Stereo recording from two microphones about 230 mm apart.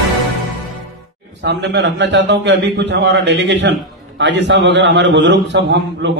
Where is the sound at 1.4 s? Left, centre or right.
Right.